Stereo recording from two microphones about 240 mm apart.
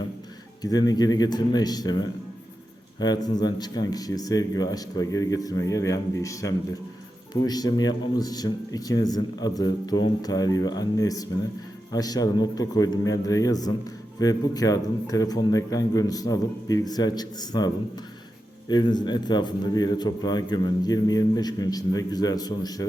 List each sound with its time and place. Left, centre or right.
0.6 s a man's voice: centre